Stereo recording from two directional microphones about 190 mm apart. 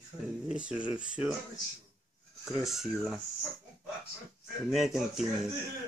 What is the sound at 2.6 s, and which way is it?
Speech, centre (ahead or behind).